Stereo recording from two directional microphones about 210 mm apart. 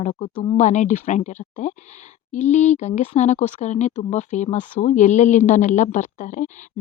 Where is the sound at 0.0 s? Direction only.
35° left (ahead or behind).